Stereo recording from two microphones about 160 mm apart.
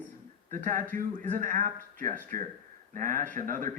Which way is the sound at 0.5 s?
55° right (ahead or behind).